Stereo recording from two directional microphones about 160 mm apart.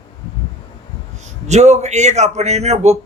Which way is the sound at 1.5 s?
45° right (ahead or behind).